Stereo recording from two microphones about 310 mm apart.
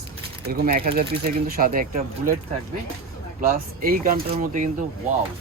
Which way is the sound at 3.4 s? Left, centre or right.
Right.